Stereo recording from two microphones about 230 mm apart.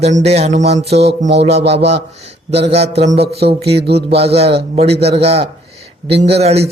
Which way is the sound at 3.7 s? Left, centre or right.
Right.